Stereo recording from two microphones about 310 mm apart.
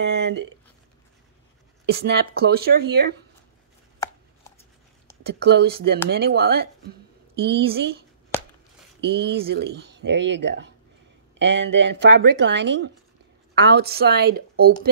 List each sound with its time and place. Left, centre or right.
0.0 s speech: right
1.9 s speech: right
5.2 s a woman's voice: right
9.0 s speech: right